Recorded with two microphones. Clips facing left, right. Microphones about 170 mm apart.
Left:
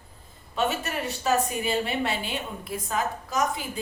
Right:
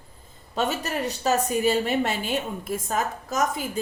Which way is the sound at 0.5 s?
40° right (ahead or behind).